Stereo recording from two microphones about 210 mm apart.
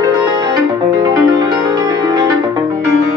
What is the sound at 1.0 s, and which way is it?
Music, 20° right (ahead or behind).